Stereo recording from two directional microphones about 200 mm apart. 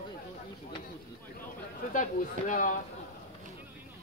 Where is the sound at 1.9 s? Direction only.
40° left (ahead or behind).